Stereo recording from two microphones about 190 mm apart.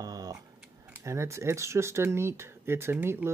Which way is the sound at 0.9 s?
15° right (ahead or behind).